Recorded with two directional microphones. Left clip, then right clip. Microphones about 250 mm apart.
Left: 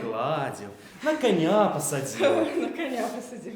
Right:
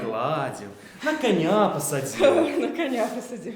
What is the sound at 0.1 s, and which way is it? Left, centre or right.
A man's voice, centre.